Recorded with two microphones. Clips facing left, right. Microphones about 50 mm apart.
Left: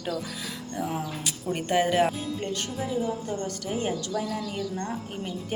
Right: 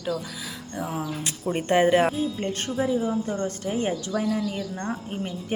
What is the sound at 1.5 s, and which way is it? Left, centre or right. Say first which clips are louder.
Speech: right 4 dB; right.